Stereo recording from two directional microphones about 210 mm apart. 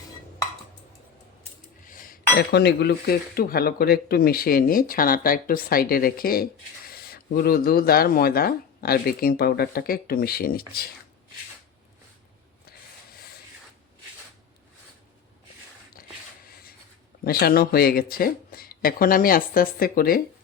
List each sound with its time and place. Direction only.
1.9 s speech: 40° left (ahead or behind)
17.2 s speech: 45° left (ahead or behind)